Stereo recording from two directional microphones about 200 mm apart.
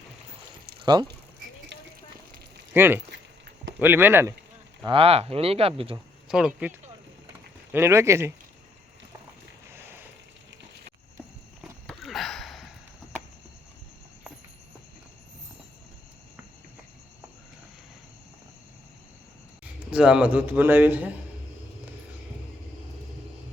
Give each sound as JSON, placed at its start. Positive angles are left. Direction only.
{"t": 2.7, "sound": "a man's voice", "side_deg": -10}
{"t": 4.9, "sound": "speech", "side_deg": -30}
{"t": 6.2, "sound": "a man's voice", "side_deg": -5}
{"t": 11.6, "sound": "sniff", "side_deg": 0}
{"t": 19.9, "sound": "a man's voice", "side_deg": -5}